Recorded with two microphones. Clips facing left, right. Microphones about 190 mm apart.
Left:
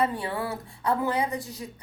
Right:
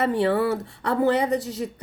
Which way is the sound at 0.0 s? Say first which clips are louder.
Right 7 dB; 75° right (ahead or behind).